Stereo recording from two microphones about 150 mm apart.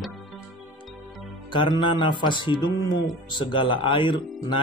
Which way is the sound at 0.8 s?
Centre (ahead or behind).